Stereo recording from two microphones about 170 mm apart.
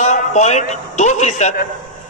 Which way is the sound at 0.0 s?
45° left (ahead or behind).